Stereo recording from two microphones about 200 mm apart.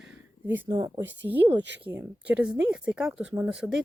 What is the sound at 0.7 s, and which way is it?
Speech, 25° right (ahead or behind).